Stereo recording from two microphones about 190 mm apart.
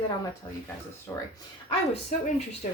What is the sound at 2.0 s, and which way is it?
Speech, 40° left (ahead or behind).